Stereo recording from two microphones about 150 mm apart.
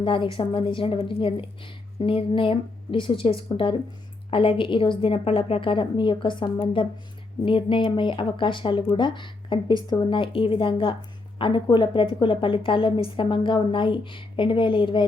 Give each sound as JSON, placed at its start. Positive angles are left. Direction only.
{"t": 0.0, "sound": "a woman's voice", "side_deg": 35}